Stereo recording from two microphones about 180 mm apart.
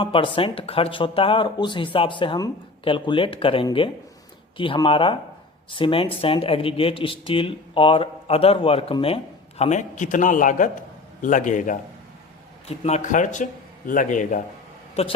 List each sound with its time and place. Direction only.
0.0 s a man's voice: 30° left (ahead or behind)